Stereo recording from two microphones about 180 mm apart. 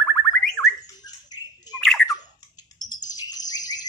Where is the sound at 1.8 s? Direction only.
Centre (ahead or behind).